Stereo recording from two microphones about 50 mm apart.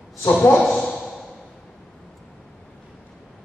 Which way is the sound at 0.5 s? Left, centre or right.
Centre.